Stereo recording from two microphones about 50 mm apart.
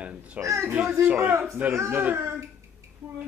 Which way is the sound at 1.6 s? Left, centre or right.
Right.